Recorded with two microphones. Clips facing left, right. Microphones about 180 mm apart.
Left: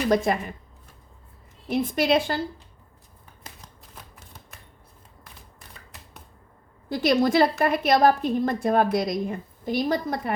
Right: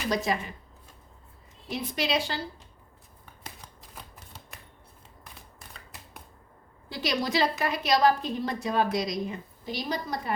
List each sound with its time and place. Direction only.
0.1 s a woman's voice: 50° left (ahead or behind)
1.6 s a woman's voice: 50° left (ahead or behind)
6.9 s a woman's voice: 50° left (ahead or behind)